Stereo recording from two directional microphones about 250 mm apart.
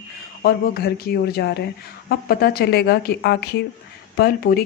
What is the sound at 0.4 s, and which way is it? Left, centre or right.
Speech, left.